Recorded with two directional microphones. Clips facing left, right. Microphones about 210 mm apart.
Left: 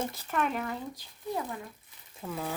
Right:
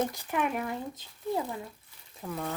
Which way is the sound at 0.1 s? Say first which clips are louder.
Right 1 dB; 15° right (ahead or behind).